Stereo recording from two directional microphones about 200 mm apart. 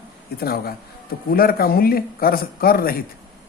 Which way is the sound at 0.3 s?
50° left (ahead or behind).